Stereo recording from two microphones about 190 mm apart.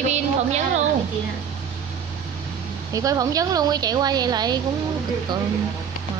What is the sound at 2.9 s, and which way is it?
A woman's voice, 15° right (ahead or behind).